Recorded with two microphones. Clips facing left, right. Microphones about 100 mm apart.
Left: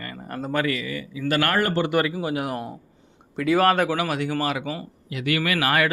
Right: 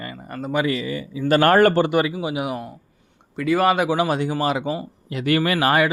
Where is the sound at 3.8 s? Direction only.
25° right (ahead or behind).